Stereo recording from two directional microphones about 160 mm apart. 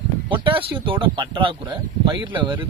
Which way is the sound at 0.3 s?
35° right (ahead or behind).